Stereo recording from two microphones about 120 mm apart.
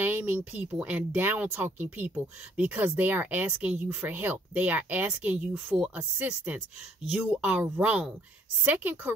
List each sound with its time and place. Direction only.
0.0 s speech: 15° right (ahead or behind)